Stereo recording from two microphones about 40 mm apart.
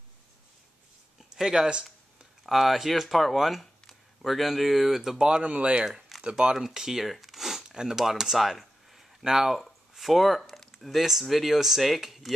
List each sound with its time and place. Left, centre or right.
1.3 s speech: centre
2.4 s speech: centre
5.4 s speech: right
5.9 s a sound: centre
6.2 s speech: right
6.5 s speech: centre
9.6 s speech: centre